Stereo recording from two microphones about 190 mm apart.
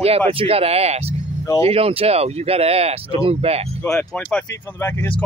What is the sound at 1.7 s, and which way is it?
Speech, 30° right (ahead or behind).